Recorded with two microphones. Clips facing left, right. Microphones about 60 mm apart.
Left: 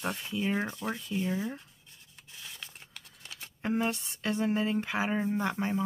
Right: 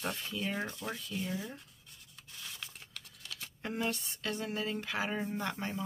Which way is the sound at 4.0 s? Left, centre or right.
Left.